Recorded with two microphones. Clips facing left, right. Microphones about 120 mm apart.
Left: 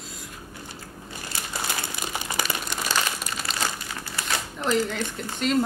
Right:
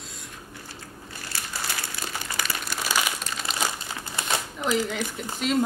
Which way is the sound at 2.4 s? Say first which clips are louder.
Left 1 dB; 5° right (ahead or behind).